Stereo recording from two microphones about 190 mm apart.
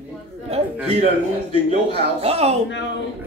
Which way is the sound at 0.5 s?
30° right (ahead or behind).